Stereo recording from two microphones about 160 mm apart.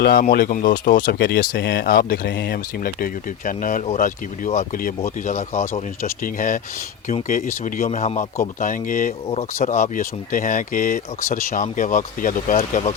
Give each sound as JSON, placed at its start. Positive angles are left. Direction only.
{"t": 0.0, "sound": "speech", "side_deg": 70}
{"t": 6.0, "sound": "speech", "side_deg": 55}
{"t": 8.5, "sound": "speech", "side_deg": 55}